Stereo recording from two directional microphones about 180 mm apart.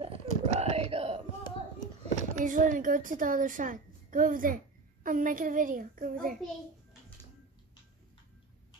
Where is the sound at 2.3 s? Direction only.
45° right (ahead or behind).